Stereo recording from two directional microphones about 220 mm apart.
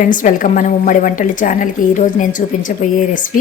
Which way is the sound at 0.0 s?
35° left (ahead or behind).